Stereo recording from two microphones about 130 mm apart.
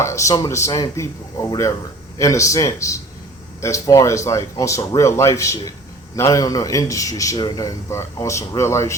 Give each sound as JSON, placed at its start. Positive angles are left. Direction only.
{"t": 0.0, "sound": "a man's voice", "side_deg": 20}